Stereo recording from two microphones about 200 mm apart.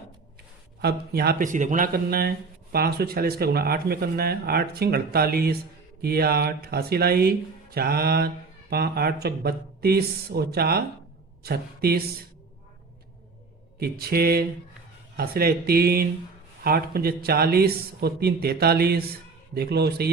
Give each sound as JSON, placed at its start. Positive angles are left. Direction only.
{"t": 0.8, "sound": "speech", "side_deg": -50}
{"t": 13.7, "sound": "speech", "side_deg": -50}